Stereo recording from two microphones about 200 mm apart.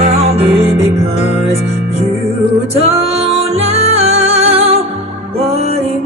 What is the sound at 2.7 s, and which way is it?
Music, 30° right (ahead or behind).